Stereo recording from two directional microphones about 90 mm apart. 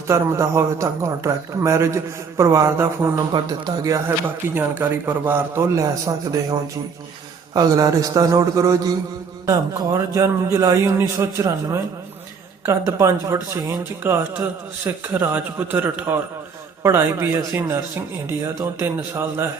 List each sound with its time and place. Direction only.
0.1 s a man's voice: 35° right (ahead or behind)
3.0 s a man's voice: 20° right (ahead or behind)
4.5 s a man's voice: 20° right (ahead or behind)